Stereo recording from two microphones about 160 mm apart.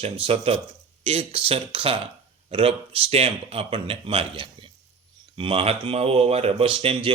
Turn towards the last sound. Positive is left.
turn(degrees=-35)  # may be behind; listen again after turning